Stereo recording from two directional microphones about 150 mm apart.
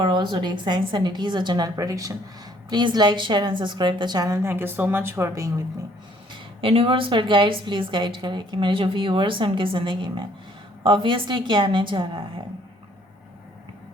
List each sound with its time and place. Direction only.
0.0 s a woman's voice: 30° right (ahead or behind)
6.3 s a woman's voice: 35° right (ahead or behind)